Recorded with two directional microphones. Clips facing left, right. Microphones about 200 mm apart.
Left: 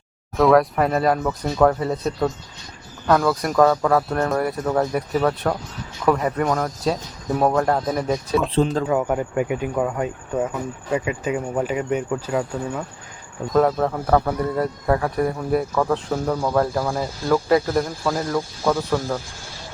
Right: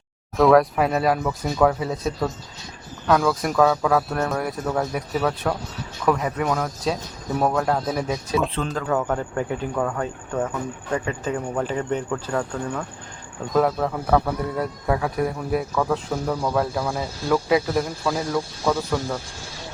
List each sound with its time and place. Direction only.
0.3 s speech: centre (ahead or behind)
8.9 s speech: 10° left (ahead or behind)